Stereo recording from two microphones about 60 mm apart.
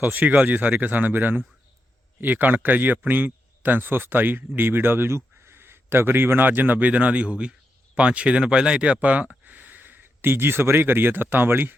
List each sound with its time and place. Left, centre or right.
0.0 s a man's voice: right